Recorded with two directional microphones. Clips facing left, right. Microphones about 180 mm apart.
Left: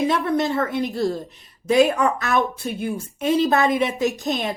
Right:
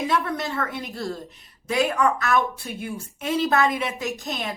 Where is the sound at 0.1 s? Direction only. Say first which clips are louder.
Left 5 dB; 20° left (ahead or behind).